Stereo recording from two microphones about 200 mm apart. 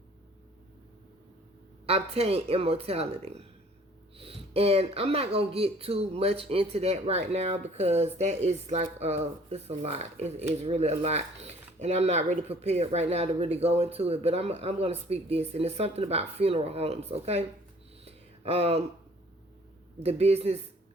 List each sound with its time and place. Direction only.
1.9 s speech: 30° right (ahead or behind)
18.0 s a sound: 30° right (ahead or behind)
20.0 s speech: 30° right (ahead or behind)